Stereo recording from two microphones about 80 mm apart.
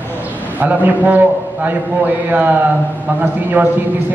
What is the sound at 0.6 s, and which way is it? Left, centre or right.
A man's voice, right.